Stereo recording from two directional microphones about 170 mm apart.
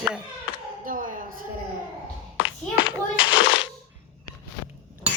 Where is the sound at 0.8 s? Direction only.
55° right (ahead or behind).